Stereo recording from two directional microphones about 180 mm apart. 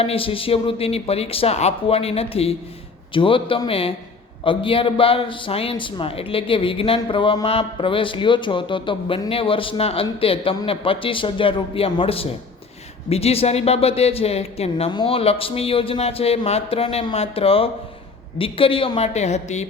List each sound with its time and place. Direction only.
0.0 s a woman's voice: 30° left (ahead or behind)